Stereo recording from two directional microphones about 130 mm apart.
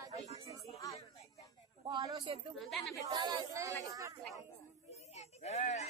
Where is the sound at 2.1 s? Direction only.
45° right (ahead or behind).